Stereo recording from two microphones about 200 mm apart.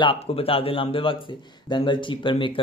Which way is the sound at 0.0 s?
25° left (ahead or behind).